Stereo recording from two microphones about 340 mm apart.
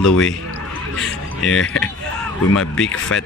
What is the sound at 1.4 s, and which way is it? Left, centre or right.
Speech, left.